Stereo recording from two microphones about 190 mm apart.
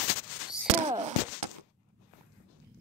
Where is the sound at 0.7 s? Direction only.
40° right (ahead or behind).